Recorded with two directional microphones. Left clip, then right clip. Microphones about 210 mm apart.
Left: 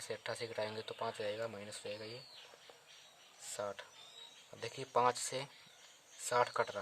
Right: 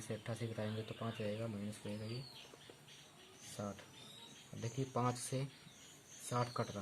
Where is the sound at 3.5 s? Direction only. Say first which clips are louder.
Left 5 dB; 45° left (ahead or behind).